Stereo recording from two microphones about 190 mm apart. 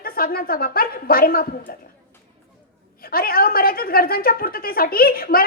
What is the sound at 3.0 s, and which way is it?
A woman's voice, 50° left (ahead or behind).